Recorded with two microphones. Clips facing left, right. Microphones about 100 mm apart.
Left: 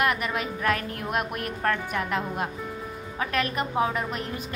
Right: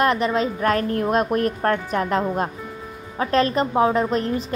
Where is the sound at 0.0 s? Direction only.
30° right (ahead or behind).